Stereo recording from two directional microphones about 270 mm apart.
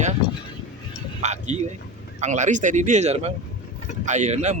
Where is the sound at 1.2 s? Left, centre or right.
Right.